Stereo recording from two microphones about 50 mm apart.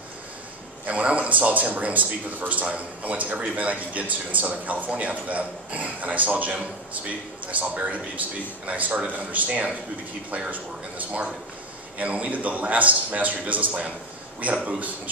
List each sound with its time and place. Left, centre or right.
0.8 s a man's voice: right